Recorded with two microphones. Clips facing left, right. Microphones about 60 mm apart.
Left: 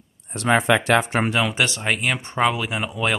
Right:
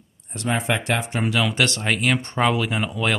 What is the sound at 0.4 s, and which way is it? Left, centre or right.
Speech, left.